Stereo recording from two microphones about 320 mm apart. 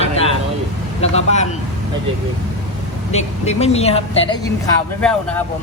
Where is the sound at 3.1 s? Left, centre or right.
Left.